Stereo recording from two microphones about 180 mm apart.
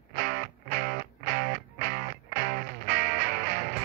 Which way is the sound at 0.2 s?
50° right (ahead or behind).